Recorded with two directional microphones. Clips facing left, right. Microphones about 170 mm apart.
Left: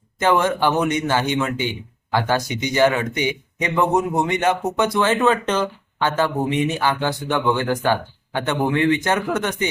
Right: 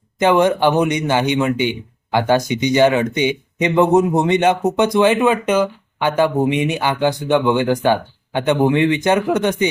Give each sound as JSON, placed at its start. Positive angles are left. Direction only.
{"t": 0.2, "sound": "a man's voice", "side_deg": -20}